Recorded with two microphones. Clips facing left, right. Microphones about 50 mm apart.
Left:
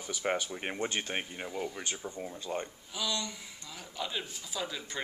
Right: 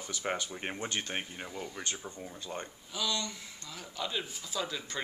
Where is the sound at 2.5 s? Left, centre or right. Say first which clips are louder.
Left 4 dB; centre.